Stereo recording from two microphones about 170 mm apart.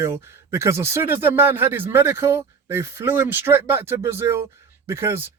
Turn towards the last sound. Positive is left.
turn(degrees=-15)  # may be behind; listen again after turning